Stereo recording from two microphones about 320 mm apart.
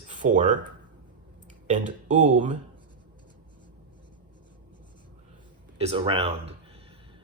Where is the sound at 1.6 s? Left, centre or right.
Right.